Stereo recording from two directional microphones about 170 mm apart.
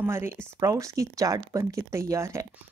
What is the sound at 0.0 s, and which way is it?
Speech, 15° right (ahead or behind).